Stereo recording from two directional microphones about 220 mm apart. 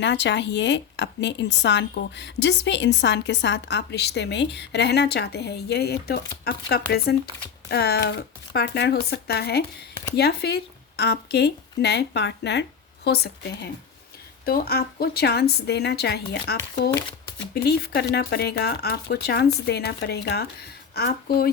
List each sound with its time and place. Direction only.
0.0 s a woman's voice: 55° left (ahead or behind)